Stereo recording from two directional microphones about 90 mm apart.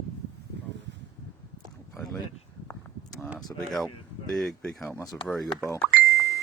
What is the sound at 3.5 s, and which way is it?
Speech, 5° left (ahead or behind).